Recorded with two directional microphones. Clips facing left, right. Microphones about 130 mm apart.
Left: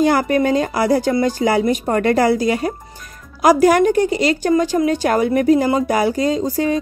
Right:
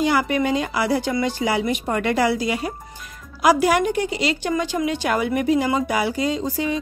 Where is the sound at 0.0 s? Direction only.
45° left (ahead or behind).